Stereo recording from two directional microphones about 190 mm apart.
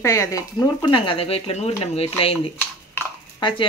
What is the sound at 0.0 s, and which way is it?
Speech, 15° left (ahead or behind).